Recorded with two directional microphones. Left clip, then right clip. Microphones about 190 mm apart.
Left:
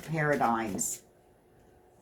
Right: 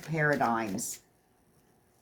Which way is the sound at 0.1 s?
40° right (ahead or behind).